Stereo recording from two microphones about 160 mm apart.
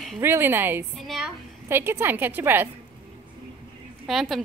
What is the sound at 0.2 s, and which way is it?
Speech, 15° right (ahead or behind).